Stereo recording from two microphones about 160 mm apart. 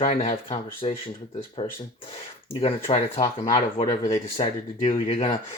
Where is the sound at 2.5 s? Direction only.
40° left (ahead or behind).